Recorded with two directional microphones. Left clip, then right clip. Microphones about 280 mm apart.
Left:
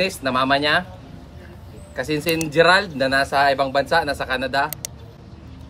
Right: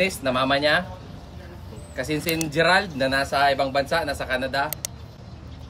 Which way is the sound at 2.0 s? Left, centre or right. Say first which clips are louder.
Left 4 dB; centre.